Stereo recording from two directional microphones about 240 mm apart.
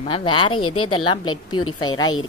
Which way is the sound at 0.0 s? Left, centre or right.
Left.